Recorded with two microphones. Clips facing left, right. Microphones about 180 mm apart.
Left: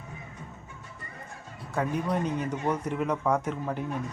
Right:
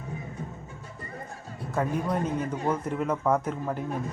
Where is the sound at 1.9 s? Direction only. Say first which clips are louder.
Right 1 dB; 45° right (ahead or behind).